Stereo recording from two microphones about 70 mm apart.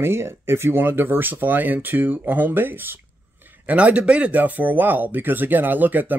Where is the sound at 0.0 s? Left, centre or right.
Right.